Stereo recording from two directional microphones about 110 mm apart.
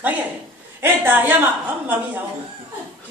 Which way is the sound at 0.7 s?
20° right (ahead or behind).